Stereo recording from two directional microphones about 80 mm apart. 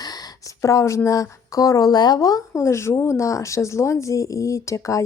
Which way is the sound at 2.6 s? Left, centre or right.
Left.